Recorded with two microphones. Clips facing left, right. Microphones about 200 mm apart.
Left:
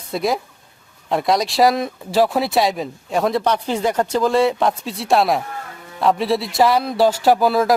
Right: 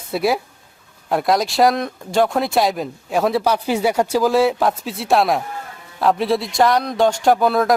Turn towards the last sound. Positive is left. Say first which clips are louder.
# even
turn(degrees=0)  # may be behind; listen again after turning